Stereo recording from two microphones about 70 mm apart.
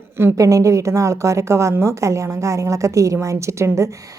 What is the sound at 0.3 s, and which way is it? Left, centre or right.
A woman's voice, right.